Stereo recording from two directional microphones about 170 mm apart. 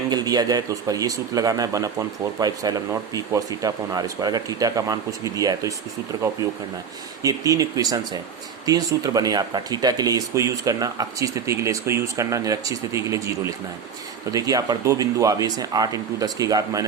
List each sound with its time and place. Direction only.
0.1 s speech: 25° right (ahead or behind)